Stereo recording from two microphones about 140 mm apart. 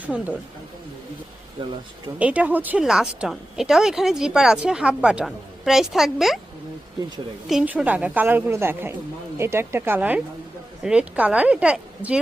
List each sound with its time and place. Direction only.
0.0 s a woman's voice: 10° right (ahead or behind)
1.6 s speech: 35° right (ahead or behind)
2.1 s speech: 10° right (ahead or behind)
7.4 s a woman's voice: 5° right (ahead or behind)